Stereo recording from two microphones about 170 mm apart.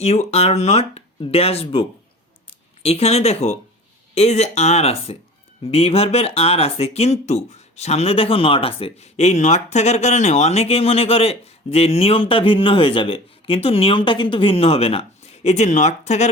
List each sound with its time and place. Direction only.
0.0 s speech: 40° left (ahead or behind)